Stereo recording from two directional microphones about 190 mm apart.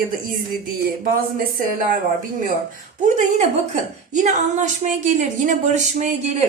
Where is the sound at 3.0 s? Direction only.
40° right (ahead or behind).